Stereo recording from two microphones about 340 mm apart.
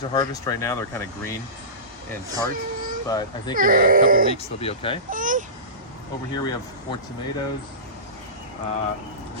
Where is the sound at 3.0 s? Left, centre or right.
Centre.